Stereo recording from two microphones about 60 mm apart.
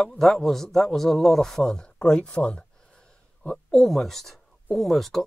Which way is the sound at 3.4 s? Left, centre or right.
Centre.